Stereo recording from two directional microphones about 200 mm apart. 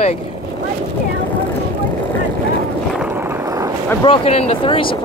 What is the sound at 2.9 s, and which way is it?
Vehicle, 5° right (ahead or behind).